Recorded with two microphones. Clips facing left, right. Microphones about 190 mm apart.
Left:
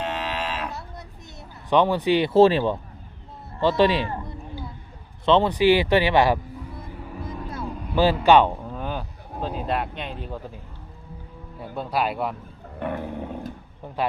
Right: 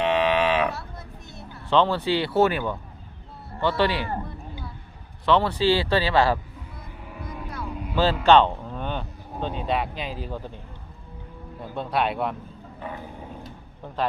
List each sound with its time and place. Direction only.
0.0 s livestock: 65° right (ahead or behind)
1.4 s speech: 15° left (ahead or behind)
5.2 s speech: 20° left (ahead or behind)
7.9 s speech: 15° left (ahead or behind)
11.7 s speech: 5° left (ahead or behind)
12.8 s roaring cats: 60° left (ahead or behind)